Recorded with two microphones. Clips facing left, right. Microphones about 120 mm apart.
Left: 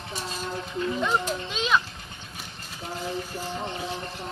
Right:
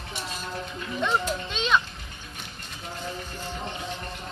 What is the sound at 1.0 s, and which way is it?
Music, 5° left (ahead or behind).